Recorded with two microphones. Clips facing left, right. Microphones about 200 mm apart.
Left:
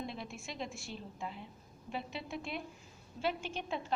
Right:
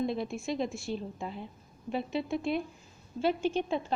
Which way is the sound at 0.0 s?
40° right (ahead or behind).